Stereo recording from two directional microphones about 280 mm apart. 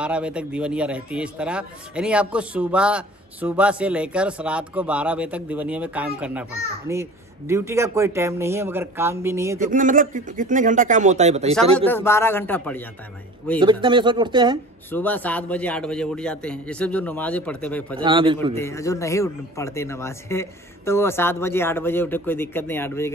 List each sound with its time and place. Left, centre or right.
0.0 s a man's voice: centre
9.7 s a man's voice: right
11.8 s a man's voice: centre
13.6 s speech: centre
14.9 s a man's voice: centre
18.0 s speech: centre
18.5 s a man's voice: centre